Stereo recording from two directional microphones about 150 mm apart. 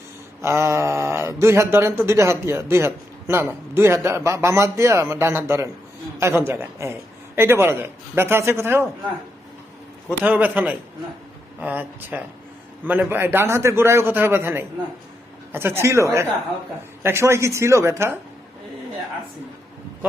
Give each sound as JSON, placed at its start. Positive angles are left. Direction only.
{"t": 0.4, "sound": "a man's voice", "side_deg": -20}
{"t": 10.1, "sound": "speech", "side_deg": -10}